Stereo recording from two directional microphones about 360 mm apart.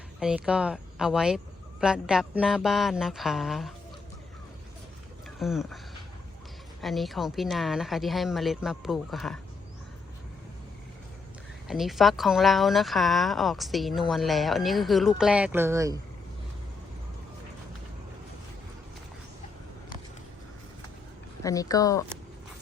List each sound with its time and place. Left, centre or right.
0.2 s speech: centre
5.4 s speech: centre
6.8 s speech: centre
11.7 s speech: centre
21.4 s speech: centre